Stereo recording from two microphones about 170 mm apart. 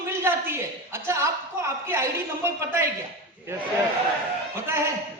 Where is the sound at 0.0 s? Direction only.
15° right (ahead or behind).